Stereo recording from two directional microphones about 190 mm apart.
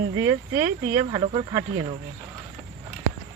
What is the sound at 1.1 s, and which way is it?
Speech, 30° right (ahead or behind).